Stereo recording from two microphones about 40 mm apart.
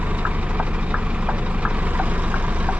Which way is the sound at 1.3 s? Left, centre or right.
Right.